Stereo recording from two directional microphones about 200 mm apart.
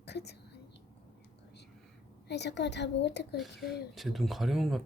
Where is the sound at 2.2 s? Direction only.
55° left (ahead or behind).